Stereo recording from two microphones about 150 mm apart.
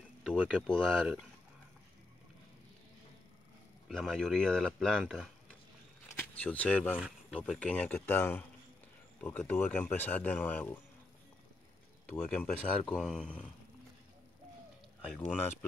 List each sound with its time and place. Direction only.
0.2 s speech: 5° right (ahead or behind)
0.7 s speech: 5° left (ahead or behind)
3.9 s speech: 5° left (ahead or behind)
6.0 s a sound: 10° left (ahead or behind)
7.3 s speech: 5° left (ahead or behind)
12.1 s speech: 5° left (ahead or behind)